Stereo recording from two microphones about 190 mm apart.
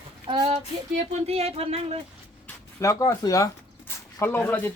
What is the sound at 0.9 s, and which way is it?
Speech, 35° right (ahead or behind).